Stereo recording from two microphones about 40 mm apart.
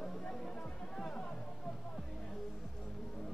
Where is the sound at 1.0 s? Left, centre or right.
Left.